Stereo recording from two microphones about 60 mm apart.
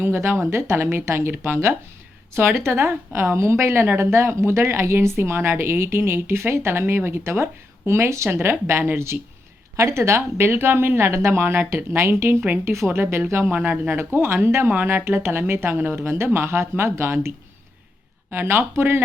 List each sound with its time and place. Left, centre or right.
0.0 s speech: right
2.3 s speech: right
9.1 s speech: right
9.7 s speech: right
14.2 s speech: right
14.7 s speech: right